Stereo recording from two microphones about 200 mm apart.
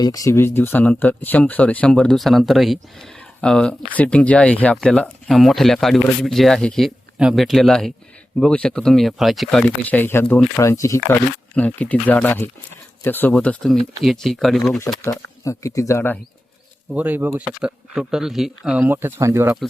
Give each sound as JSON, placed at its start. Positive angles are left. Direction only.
{"t": 0.0, "sound": "speech", "side_deg": 15}
{"t": 15.0, "sound": "speech", "side_deg": 15}
{"t": 16.9, "sound": "speech", "side_deg": -10}